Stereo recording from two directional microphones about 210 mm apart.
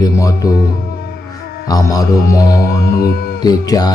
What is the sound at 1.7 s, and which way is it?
Mantra, 15° left (ahead or behind).